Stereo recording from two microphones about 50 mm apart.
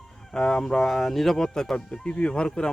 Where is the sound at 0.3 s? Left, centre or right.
Centre.